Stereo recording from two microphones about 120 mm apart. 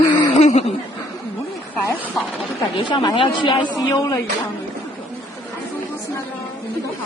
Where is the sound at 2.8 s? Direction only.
40° left (ahead or behind).